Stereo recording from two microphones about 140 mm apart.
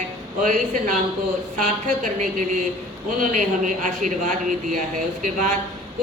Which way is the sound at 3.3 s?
65° right (ahead or behind).